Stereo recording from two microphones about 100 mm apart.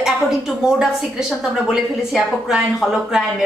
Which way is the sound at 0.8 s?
5° right (ahead or behind).